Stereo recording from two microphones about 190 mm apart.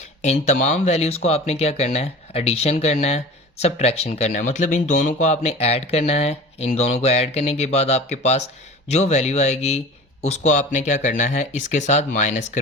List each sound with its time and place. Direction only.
0.2 s speech: 40° left (ahead or behind)